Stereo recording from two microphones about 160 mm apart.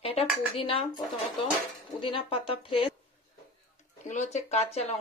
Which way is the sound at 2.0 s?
35° left (ahead or behind).